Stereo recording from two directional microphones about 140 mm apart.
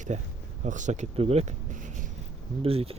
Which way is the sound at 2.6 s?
45° right (ahead or behind).